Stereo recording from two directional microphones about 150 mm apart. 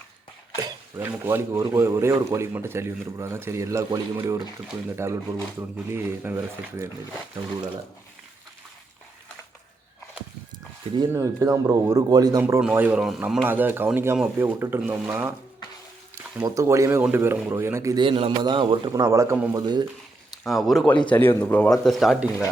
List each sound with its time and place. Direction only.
0.5 s a man's voice: 15° right (ahead or behind)
11.1 s a man's voice: 20° right (ahead or behind)
12.4 s speech: 15° right (ahead or behind)
16.4 s a man's voice: 20° right (ahead or behind)
17.9 s a man's voice: 35° right (ahead or behind)
20.4 s speech: centre (ahead or behind)
21.1 s speech: 10° left (ahead or behind)